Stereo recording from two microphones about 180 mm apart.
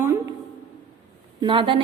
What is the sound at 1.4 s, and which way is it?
Speech, 25° right (ahead or behind).